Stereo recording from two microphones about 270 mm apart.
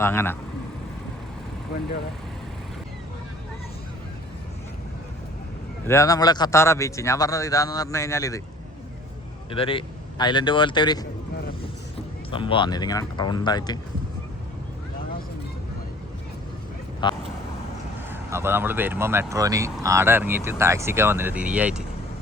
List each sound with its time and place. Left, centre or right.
0.0 s a man's voice: centre
5.9 s a man's voice: centre
9.5 s a man's voice: centre
12.3 s a man's voice: centre
17.0 s vehicle: centre
18.1 s speech: centre